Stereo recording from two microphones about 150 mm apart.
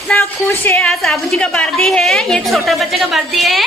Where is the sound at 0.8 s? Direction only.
Centre (ahead or behind).